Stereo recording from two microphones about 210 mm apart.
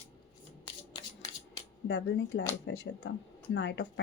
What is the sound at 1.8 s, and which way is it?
Speech, 55° left (ahead or behind).